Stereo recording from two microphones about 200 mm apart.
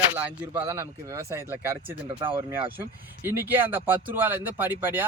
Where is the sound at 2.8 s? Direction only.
10° right (ahead or behind).